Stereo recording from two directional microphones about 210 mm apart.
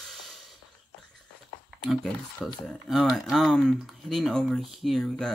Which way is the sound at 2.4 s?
Centre (ahead or behind).